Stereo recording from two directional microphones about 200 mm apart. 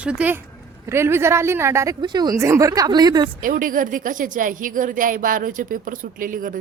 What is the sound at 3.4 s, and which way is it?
A woman's voice, 45° right (ahead or behind).